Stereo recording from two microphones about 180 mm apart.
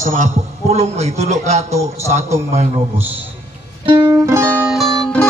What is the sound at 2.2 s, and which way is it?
Speech, 15° right (ahead or behind).